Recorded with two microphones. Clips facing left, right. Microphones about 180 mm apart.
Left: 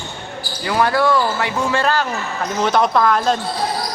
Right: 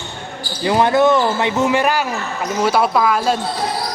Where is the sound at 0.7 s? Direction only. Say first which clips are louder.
Right 3 dB; 20° right (ahead or behind); by 3.4 s 5° right (ahead or behind).